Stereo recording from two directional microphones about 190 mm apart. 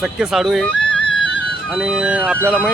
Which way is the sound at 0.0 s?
Centre (ahead or behind).